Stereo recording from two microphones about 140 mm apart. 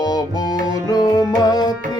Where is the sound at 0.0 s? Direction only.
30° left (ahead or behind).